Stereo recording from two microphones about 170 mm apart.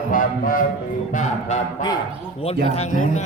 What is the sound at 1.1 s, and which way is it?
Speech, 45° left (ahead or behind).